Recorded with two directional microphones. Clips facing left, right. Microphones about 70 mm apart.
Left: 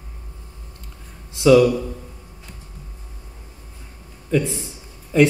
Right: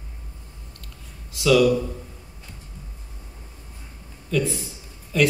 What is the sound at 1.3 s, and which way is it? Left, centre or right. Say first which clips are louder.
Speech: left 6 dB; left.